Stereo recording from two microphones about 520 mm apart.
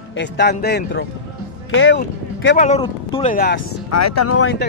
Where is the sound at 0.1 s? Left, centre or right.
Centre.